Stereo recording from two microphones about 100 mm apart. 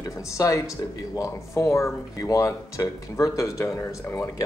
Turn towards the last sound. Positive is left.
turn(degrees=20)  # may be behind; listen again after turning